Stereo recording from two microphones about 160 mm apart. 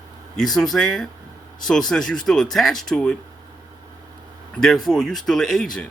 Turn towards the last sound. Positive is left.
turn(degrees=0)  # may be behind; listen again after turning